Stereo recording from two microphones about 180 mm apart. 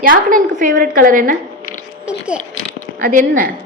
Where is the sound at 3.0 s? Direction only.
50° right (ahead or behind).